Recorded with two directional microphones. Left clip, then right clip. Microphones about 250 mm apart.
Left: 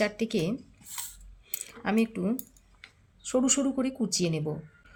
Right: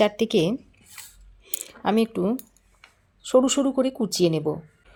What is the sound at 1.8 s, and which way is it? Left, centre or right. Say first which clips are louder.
Speech: right 6 dB; right.